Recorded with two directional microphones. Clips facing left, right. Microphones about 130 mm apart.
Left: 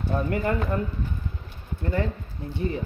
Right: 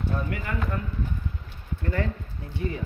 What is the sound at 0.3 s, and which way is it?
Speech, 40° left (ahead or behind).